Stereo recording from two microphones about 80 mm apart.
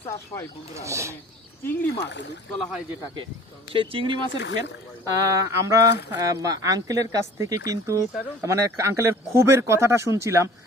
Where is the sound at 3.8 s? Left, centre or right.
Right.